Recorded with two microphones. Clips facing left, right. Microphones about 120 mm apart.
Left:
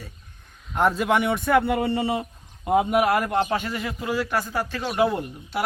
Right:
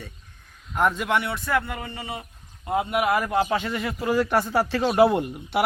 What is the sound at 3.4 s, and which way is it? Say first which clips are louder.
Speech: even; 15° left (ahead or behind).